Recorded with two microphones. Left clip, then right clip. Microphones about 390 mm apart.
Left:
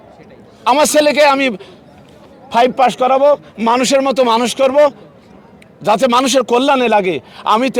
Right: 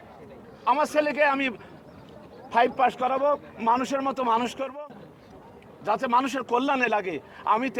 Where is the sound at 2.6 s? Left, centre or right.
Left.